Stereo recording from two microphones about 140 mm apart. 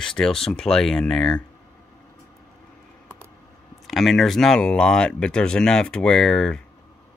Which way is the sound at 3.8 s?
Centre (ahead or behind).